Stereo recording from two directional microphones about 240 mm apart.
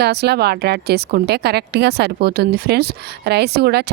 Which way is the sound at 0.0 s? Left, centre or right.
Right.